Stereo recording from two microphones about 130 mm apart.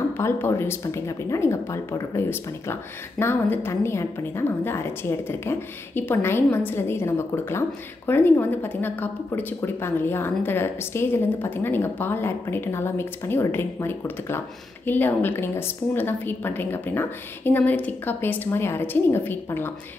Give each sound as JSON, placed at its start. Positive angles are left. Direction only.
{"t": 0.2, "sound": "a woman's voice", "side_deg": 20}